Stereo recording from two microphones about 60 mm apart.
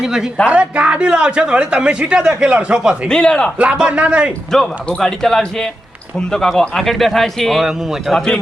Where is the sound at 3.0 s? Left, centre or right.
Centre.